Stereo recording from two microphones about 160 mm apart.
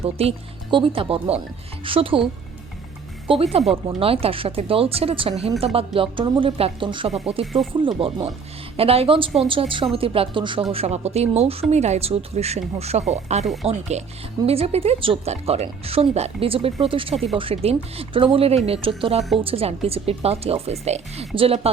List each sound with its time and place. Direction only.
0.0 s speech: 40° right (ahead or behind)
3.2 s speech: 35° right (ahead or behind)
13.4 s speech: centre (ahead or behind)
13.7 s speech: 45° right (ahead or behind)